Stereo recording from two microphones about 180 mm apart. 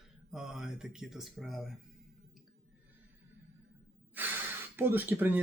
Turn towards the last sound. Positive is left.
turn(degrees=-10)  # may be behind; listen again after turning